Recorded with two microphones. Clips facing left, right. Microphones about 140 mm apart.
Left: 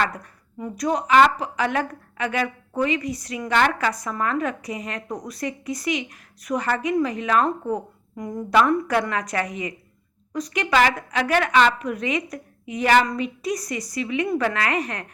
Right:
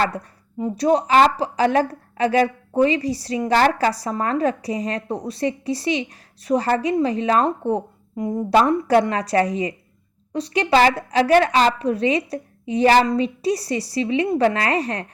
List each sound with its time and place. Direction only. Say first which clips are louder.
0.0 s speech: right 3 dB; 30° right (ahead or behind)